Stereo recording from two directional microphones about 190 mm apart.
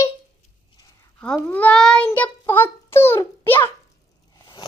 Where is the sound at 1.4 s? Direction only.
5° left (ahead or behind).